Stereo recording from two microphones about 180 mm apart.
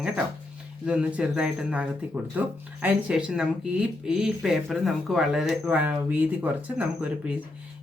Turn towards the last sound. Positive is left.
turn(degrees=-10)  # may be behind; listen again after turning